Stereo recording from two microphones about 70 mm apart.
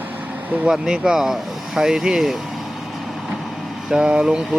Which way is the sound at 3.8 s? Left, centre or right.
Centre.